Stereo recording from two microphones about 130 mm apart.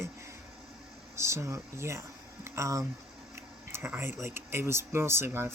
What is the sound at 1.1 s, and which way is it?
Speech, 20° right (ahead or behind).